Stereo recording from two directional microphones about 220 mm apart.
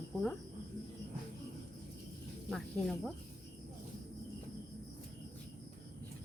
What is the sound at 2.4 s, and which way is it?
Speech, centre (ahead or behind).